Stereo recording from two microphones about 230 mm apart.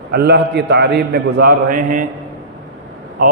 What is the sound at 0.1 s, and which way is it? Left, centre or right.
A man's voice, right.